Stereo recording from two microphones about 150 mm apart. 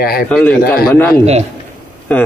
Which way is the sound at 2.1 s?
10° left (ahead or behind).